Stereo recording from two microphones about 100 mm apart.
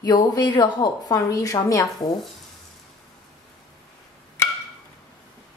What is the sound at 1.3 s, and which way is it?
Speech, 35° left (ahead or behind).